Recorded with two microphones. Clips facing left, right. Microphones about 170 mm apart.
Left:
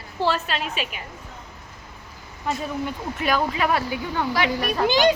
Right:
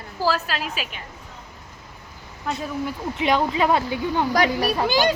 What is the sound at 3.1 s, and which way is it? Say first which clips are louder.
Speech: right 3 dB; 25° right (ahead or behind).